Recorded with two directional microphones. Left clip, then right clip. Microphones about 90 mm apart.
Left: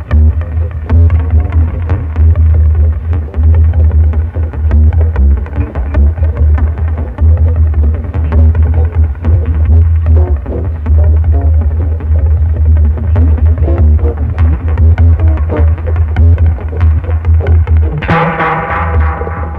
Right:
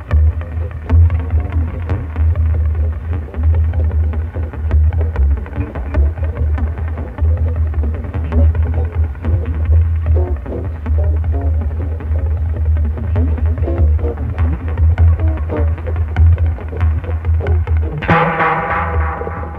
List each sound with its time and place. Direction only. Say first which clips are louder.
4.6 s music: left 8 dB; 30° right (ahead or behind)
13.1 s music: left 4 dB; 35° right (ahead or behind)
17.4 s music: left 4 dB; 30° right (ahead or behind)